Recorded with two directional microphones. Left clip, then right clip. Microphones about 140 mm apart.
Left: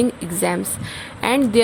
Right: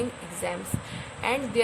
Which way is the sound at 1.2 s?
80° left.